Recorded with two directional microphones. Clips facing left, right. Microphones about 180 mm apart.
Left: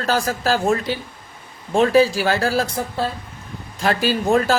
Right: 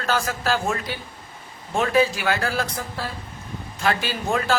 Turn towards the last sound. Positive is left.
turn(degrees=40)  # may be behind; listen again after turning